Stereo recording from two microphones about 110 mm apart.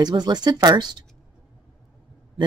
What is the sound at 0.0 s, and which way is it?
Speech, 40° right (ahead or behind).